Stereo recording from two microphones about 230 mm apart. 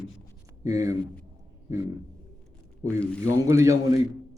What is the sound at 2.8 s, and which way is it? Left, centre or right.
A man's voice, centre.